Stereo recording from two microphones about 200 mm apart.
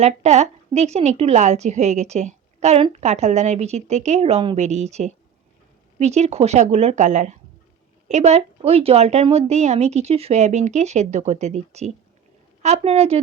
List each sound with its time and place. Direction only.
0.0 s a woman's voice: 35° right (ahead or behind)